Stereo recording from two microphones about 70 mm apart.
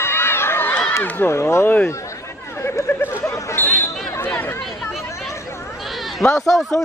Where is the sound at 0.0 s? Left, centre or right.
Left.